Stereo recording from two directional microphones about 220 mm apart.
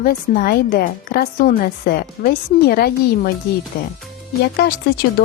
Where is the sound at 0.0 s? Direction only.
40° left (ahead or behind).